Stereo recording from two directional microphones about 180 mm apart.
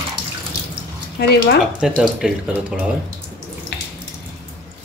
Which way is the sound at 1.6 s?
Centre (ahead or behind).